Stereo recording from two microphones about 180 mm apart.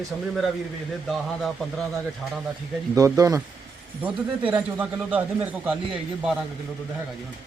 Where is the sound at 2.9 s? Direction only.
20° right (ahead or behind).